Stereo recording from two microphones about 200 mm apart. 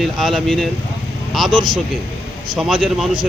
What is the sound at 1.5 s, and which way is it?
Speech, 25° right (ahead or behind).